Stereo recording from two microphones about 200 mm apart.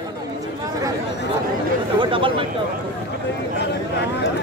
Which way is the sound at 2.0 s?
25° right (ahead or behind).